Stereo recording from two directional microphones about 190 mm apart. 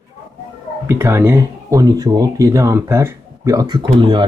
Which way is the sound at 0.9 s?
15° right (ahead or behind).